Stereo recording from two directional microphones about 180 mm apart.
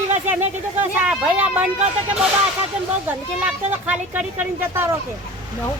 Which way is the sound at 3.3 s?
10° right (ahead or behind).